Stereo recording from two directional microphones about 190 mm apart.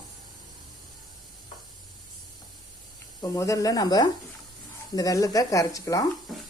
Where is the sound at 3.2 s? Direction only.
15° left (ahead or behind).